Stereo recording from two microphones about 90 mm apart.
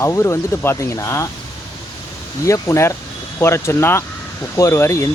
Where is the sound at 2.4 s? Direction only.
35° left (ahead or behind).